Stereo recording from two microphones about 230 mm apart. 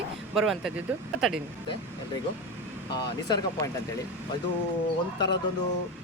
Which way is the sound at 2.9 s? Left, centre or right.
Centre.